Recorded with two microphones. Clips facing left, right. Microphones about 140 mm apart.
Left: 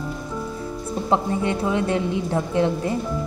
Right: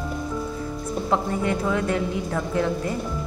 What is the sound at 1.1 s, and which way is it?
A woman's voice, 25° left (ahead or behind).